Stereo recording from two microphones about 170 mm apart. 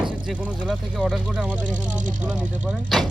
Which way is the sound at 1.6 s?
50° right (ahead or behind).